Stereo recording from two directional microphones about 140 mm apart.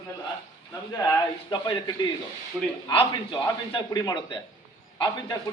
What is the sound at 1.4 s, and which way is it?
Speech, 35° left (ahead or behind).